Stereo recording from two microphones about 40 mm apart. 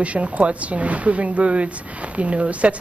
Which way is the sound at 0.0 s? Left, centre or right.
Right.